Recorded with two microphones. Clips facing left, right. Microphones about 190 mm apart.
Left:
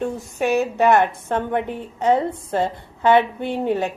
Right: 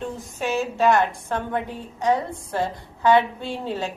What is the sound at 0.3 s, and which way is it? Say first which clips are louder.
A woman's voice: left 5 dB; 15° left (ahead or behind).